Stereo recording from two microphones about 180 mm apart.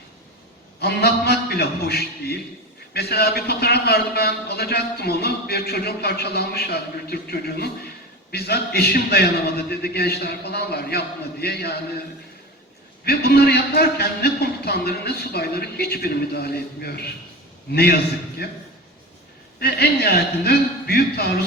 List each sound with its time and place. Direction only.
0.8 s a man's voice: 60° left (ahead or behind)
13.1 s a man's voice: 60° left (ahead or behind)
18.4 s a man's voice: 65° left (ahead or behind)